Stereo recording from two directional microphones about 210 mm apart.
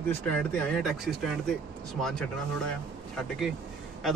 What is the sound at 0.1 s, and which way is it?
A man's voice, 5° left (ahead or behind).